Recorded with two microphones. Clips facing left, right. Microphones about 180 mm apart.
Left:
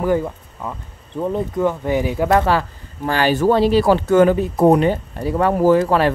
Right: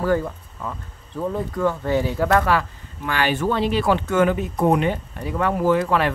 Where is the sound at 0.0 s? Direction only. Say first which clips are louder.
Left 3 dB; 15° left (ahead or behind).